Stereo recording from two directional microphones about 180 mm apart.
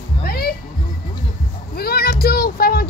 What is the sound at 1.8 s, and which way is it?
Music, 60° left (ahead or behind).